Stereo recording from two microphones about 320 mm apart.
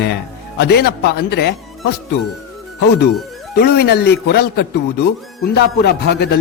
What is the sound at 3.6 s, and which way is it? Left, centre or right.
A man's voice, left.